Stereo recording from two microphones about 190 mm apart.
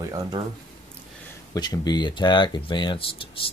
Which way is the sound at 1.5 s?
20° left (ahead or behind).